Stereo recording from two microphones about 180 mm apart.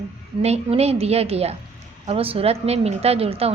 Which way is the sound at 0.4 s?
35° right (ahead or behind).